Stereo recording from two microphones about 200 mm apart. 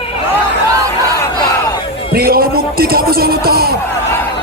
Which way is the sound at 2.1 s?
50° right (ahead or behind).